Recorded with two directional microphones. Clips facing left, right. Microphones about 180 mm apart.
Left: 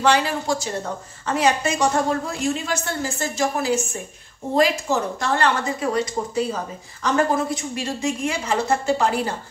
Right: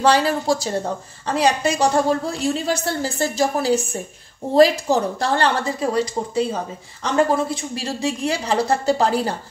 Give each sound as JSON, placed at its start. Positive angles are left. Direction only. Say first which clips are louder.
{"t": 0.0, "sound": "a woman's voice", "louder": "right 2 dB", "side_deg": -35}